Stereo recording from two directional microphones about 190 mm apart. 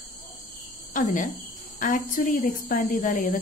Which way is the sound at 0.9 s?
45° left (ahead or behind).